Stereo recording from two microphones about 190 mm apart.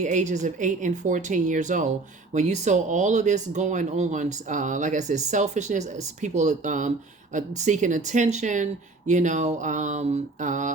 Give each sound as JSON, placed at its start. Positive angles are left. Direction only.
{"t": 0.0, "sound": "speech", "side_deg": -40}